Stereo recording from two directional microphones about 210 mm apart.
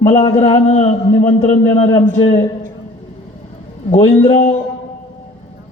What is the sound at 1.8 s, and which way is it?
Speech, 20° left (ahead or behind).